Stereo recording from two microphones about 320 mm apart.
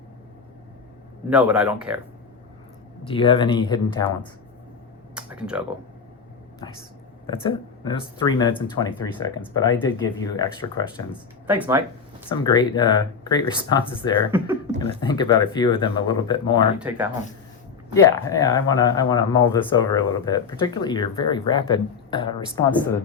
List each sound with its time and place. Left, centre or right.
1.3 s speech: centre
3.1 s speech: centre
5.1 s a sound: centre
7.4 s speech: centre
11.4 s speech: centre
12.3 s speech: centre
16.7 s speech: centre
17.9 s speech: centre